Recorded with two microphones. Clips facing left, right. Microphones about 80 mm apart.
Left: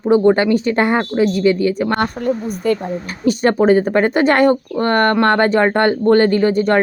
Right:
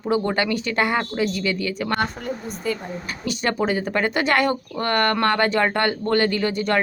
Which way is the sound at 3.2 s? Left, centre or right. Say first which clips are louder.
Left 10 dB; left.